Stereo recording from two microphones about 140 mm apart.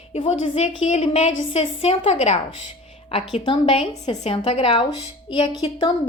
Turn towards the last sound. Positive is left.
turn(degrees=35)  # may be behind; listen again after turning